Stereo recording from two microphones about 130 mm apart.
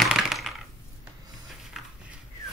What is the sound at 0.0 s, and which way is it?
Coin, centre (ahead or behind).